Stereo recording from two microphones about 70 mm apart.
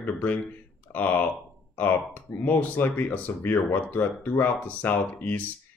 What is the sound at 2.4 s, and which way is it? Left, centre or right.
Speech, left.